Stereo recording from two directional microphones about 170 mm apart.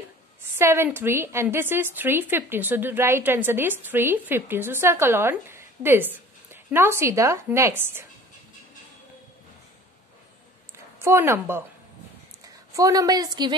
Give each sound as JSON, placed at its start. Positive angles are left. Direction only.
{"t": 0.4, "sound": "a woman's voice", "side_deg": -15}
{"t": 11.0, "sound": "a woman's voice", "side_deg": -15}
{"t": 12.7, "sound": "a woman's voice", "side_deg": -20}